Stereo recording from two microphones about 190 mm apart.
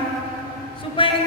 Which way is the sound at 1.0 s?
25° left (ahead or behind).